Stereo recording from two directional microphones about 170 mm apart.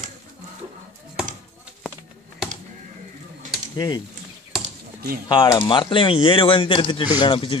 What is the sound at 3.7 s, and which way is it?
Speech, 20° left (ahead or behind).